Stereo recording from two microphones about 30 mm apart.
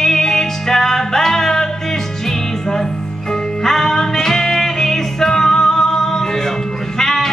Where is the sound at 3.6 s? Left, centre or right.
Centre.